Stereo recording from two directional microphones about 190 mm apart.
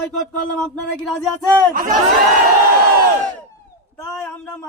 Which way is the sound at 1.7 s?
45° right (ahead or behind).